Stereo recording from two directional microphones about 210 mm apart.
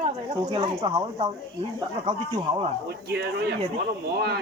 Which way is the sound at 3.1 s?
50° right (ahead or behind).